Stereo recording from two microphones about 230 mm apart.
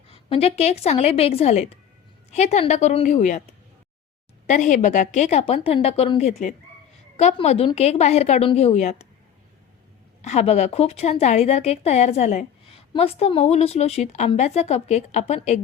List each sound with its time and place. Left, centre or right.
0.1 s speech: left
4.4 s speech: left
10.2 s speech: left